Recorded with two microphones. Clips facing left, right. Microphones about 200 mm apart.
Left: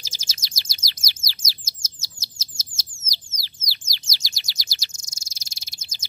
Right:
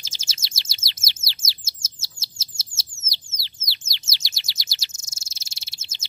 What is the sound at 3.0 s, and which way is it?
Bird, 25° right (ahead or behind).